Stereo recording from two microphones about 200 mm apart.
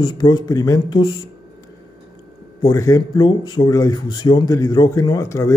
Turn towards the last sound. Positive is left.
turn(degrees=15)  # may be behind; listen again after turning